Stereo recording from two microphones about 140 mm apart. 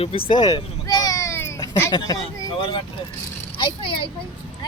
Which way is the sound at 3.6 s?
35° left (ahead or behind).